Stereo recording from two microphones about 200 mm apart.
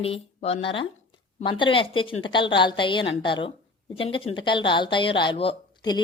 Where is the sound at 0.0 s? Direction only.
30° left (ahead or behind).